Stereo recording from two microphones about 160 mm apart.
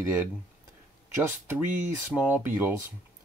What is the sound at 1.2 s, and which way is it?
Speech, 10° right (ahead or behind).